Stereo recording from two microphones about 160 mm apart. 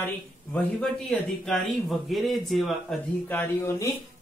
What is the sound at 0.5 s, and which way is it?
A man's voice, 5° left (ahead or behind).